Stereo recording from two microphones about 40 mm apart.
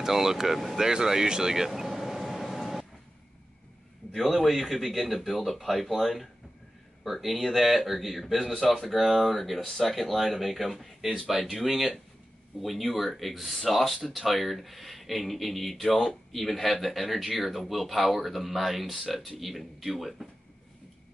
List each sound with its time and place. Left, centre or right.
0.0 s speech: centre
4.1 s speech: centre